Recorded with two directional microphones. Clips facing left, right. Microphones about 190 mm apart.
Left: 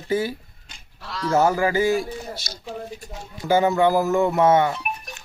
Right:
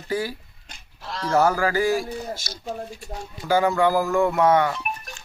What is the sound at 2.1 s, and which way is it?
Speech, 50° right (ahead or behind).